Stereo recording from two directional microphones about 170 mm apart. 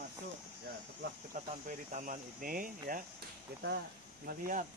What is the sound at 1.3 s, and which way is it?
Speech, 45° right (ahead or behind).